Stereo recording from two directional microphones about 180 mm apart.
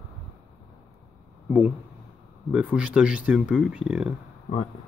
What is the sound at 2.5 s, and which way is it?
Speech, 5° right (ahead or behind).